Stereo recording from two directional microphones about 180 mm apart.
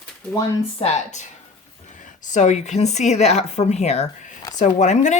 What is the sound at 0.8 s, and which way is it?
Speech, 40° left (ahead or behind).